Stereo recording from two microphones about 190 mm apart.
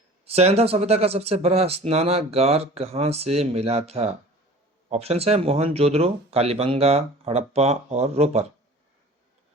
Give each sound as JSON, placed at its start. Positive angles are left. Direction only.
{"t": 0.3, "sound": "speech", "side_deg": -35}